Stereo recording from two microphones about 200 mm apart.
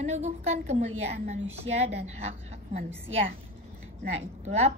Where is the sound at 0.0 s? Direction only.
35° right (ahead or behind).